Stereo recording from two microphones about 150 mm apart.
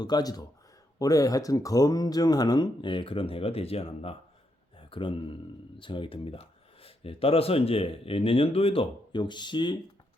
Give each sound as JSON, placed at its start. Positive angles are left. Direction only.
{"t": 0.0, "sound": "speech", "side_deg": 25}